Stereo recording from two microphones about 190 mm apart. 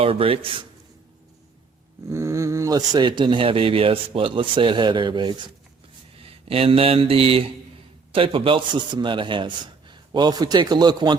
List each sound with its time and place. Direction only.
0.0 s speech: 30° right (ahead or behind)
2.0 s speech: 15° right (ahead or behind)